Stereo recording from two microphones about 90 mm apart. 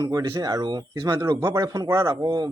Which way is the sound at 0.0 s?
45° right (ahead or behind).